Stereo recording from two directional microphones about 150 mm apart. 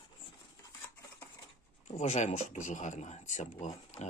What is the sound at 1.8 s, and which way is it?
Speech, 55° left (ahead or behind).